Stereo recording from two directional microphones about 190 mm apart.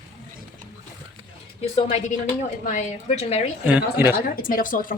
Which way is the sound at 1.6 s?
30° left (ahead or behind).